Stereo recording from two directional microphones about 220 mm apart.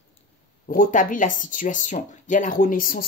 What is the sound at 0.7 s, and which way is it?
Speech, 35° left (ahead or behind).